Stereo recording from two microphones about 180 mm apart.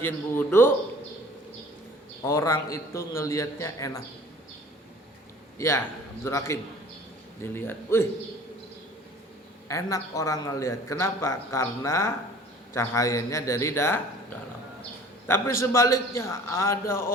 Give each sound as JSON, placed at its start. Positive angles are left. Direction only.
{"t": 0.0, "sound": "a man's voice", "side_deg": 15}
{"t": 2.2, "sound": "a man's voice", "side_deg": 15}
{"t": 5.5, "sound": "a man's voice", "side_deg": 15}
{"t": 9.6, "sound": "a man's voice", "side_deg": 20}
{"t": 15.3, "sound": "a man's voice", "side_deg": 15}